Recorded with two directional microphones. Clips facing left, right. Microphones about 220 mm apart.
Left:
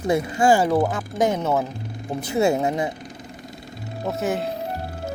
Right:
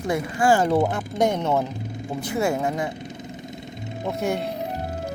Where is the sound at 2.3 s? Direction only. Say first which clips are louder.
Left 4 dB; 25° left (ahead or behind).